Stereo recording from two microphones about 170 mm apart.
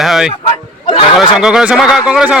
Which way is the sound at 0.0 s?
5° right (ahead or behind).